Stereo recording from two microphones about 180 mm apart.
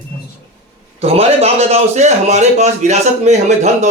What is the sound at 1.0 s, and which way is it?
A man's voice, 35° right (ahead or behind).